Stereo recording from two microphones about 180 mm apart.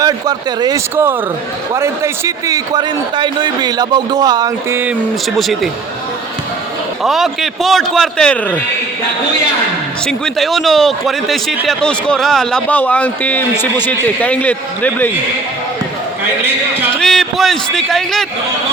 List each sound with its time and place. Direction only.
0.0 s a man's voice: 20° right (ahead or behind)
7.0 s a man's voice: centre (ahead or behind)
10.1 s a man's voice: centre (ahead or behind)
16.4 s a man's voice: 10° right (ahead or behind)
17.0 s a man's voice: centre (ahead or behind)